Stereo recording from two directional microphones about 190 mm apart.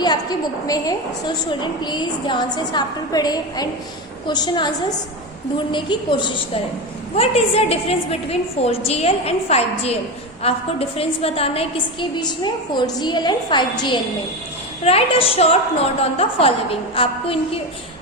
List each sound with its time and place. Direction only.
0.0 s a woman's voice: 20° left (ahead or behind)